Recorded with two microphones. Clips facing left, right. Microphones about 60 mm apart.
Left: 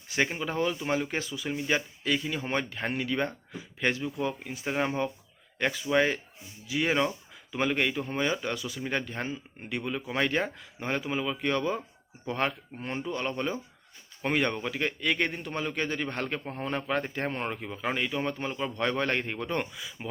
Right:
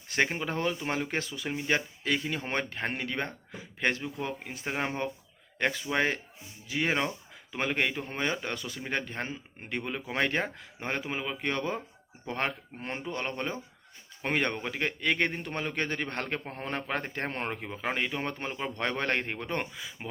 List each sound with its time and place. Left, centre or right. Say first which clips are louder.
0.1 s speech: even; right
1.5 s speech: left 1 dB; right
4.6 s speech: left 3 dB; centre
5.5 s speech: left 3 dB; right
8.8 s speech: left 1 dB; right